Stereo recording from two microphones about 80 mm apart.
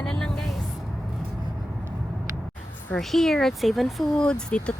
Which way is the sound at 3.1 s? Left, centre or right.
Centre.